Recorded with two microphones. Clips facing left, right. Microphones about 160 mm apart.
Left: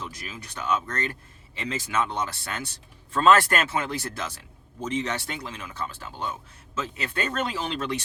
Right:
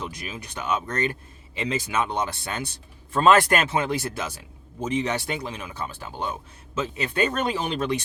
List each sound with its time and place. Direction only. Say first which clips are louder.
0.0 s speech: right 4 dB; 15° right (ahead or behind)